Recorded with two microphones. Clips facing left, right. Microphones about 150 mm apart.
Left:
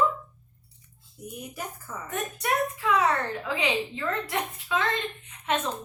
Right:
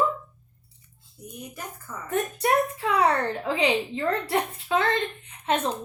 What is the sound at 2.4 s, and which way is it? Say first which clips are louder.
Speech: right 3 dB; 30° right (ahead or behind).